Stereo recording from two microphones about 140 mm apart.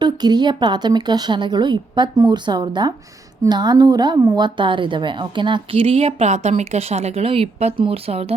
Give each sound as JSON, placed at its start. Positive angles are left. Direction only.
{"t": 0.0, "sound": "a woman's voice", "side_deg": -30}